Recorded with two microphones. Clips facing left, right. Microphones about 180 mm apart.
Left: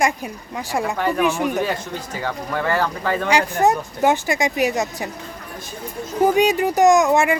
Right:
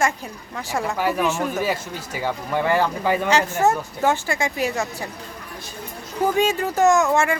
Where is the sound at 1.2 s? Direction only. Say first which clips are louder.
Left 3 dB; 15° left (ahead or behind).